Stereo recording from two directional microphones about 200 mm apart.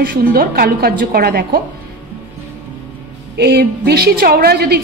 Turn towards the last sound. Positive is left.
turn(degrees=-50)  # may be behind; listen again after turning